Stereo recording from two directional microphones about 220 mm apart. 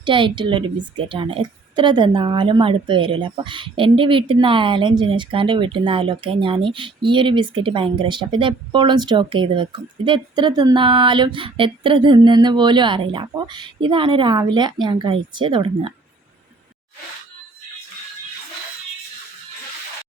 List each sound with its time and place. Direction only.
0.0 s speech: 20° right (ahead or behind)